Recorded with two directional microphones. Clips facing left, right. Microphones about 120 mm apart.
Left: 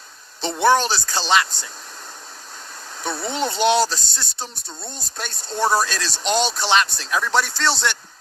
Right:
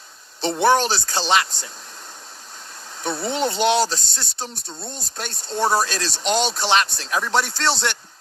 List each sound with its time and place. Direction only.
0.4 s speech: 20° right (ahead or behind)
3.0 s speech: 20° right (ahead or behind)